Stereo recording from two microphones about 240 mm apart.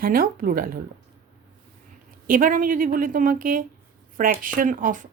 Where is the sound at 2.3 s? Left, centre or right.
Right.